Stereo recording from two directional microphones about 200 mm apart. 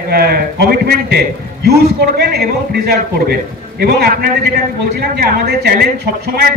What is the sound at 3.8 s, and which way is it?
A man's voice, 50° right (ahead or behind).